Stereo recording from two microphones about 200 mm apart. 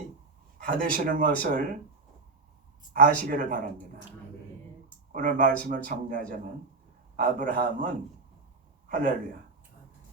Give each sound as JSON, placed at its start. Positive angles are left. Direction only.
{"t": 0.7, "sound": "speech", "side_deg": -45}
{"t": 2.9, "sound": "speech", "side_deg": -40}
{"t": 5.1, "sound": "speech", "side_deg": -40}